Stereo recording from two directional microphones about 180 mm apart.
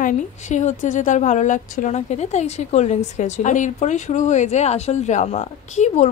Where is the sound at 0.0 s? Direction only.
40° left (ahead or behind).